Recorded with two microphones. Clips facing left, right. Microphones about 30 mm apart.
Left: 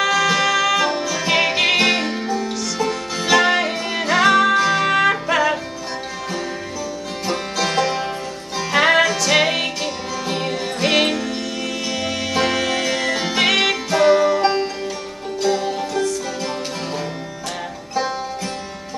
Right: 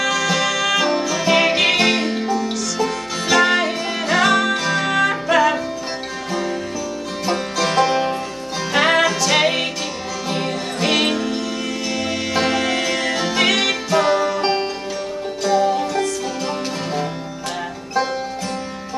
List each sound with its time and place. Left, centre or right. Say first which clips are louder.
0.0 s music: left 2 dB; centre
7.2 s music: right 2 dB; centre